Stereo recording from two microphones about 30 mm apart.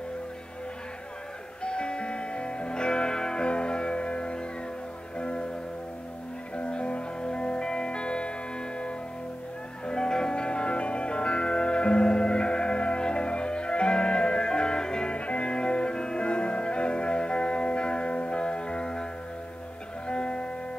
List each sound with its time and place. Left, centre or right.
1.6 s music: left
6.5 s music: left
9.8 s music: left
15.1 s music: left
20.1 s music: left